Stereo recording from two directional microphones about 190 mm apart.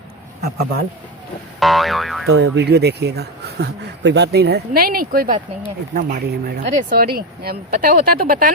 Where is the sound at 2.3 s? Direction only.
80° right.